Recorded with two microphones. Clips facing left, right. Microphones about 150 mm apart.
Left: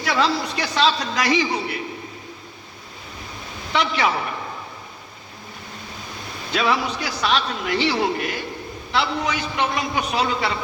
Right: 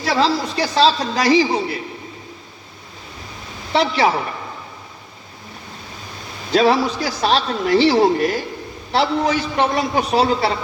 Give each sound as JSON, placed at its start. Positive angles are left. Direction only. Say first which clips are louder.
{"t": 0.0, "sound": "a man's voice", "louder": "right 3 dB", "side_deg": -35}
{"t": 3.7, "sound": "a man's voice", "louder": "right 5 dB", "side_deg": -35}
{"t": 6.5, "sound": "a man's voice", "louder": "right 7 dB", "side_deg": -35}